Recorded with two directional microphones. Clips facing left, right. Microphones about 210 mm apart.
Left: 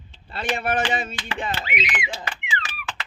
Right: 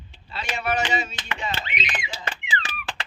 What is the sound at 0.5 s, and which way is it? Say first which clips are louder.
Speech: even; 55° left (ahead or behind).